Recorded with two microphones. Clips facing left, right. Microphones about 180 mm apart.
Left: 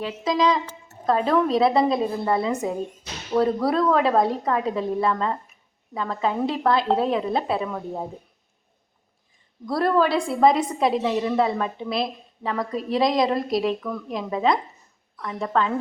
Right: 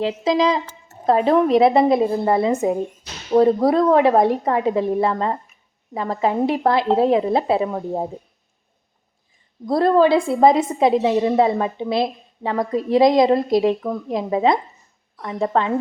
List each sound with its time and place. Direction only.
0.0 s a woman's voice: 30° right (ahead or behind)
3.3 s a woman's voice: 30° right (ahead or behind)
9.6 s a woman's voice: 25° right (ahead or behind)